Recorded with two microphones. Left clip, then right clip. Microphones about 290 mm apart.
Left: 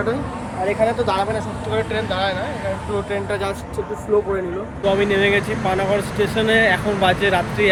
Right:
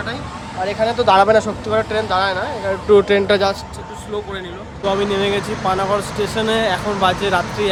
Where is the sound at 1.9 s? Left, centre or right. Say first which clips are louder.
Right 3 dB; centre.